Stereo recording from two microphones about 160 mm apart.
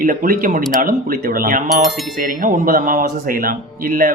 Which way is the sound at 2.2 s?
55° right (ahead or behind).